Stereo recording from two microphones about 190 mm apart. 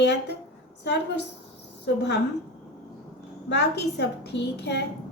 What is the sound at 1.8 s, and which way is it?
Speech, 65° left (ahead or behind).